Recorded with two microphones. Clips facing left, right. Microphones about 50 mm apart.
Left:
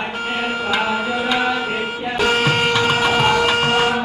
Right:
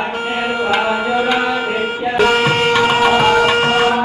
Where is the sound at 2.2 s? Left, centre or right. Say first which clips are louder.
Right 3 dB; right.